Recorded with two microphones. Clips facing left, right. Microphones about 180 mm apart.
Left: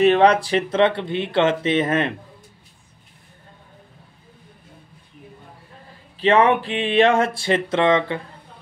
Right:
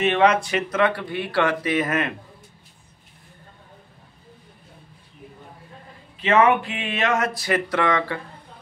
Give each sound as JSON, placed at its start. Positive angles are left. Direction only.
{"t": 0.0, "sound": "speech", "side_deg": 35}
{"t": 6.1, "sound": "speech", "side_deg": 35}